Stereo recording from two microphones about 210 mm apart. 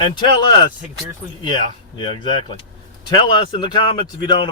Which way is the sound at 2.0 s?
25° left (ahead or behind).